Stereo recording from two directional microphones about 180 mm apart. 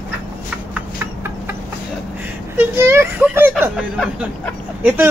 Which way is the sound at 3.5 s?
Centre (ahead or behind).